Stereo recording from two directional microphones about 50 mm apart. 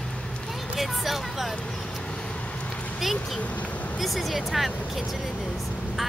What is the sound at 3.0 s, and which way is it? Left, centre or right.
Vehicle, centre.